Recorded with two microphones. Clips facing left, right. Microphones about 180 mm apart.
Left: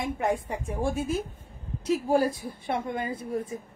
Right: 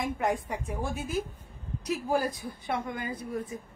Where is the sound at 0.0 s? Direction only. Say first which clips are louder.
Left 2 dB; 25° left (ahead or behind).